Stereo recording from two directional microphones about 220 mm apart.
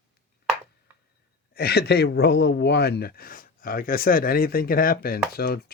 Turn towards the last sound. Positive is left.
turn(degrees=45)  # may be behind; listen again after turning